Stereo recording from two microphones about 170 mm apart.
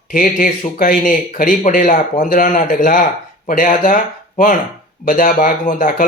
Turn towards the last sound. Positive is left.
turn(degrees=55)  # may be behind; listen again after turning